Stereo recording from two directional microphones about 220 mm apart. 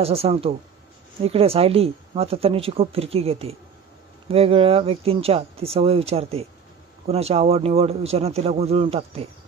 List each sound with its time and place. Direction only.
0.0 s speech: 25° right (ahead or behind)